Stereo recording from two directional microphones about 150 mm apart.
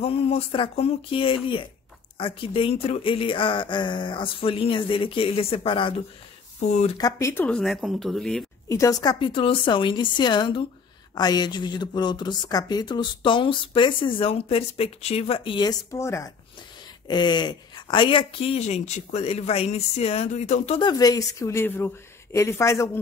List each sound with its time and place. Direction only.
0.0 s speech: 40° left (ahead or behind)
7.0 s speech: 20° left (ahead or behind)
7.4 s speech: 5° left (ahead or behind)
8.6 s speech: 20° left (ahead or behind); by 20.8 s 45° left (ahead or behind)
20.8 s speech: 25° left (ahead or behind)